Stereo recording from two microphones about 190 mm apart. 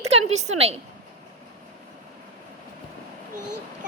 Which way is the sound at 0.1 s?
35° right (ahead or behind).